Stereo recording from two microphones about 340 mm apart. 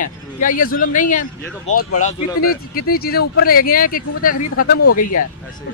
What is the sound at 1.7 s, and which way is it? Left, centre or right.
Speech, left.